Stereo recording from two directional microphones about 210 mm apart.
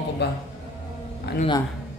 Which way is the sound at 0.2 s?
50° left (ahead or behind).